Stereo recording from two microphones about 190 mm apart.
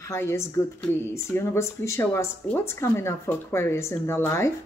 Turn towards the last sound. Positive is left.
turn(degrees=15)  # may be behind; listen again after turning